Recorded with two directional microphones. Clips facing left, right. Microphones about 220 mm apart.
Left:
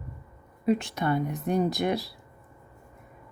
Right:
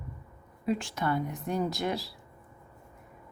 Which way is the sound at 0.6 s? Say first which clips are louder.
Left 5 dB; 20° left (ahead or behind).